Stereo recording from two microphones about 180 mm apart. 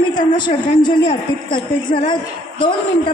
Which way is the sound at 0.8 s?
25° left (ahead or behind).